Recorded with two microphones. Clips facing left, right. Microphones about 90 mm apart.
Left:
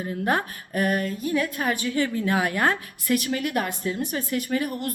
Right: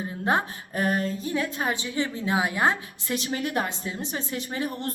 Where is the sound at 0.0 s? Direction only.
25° right (ahead or behind).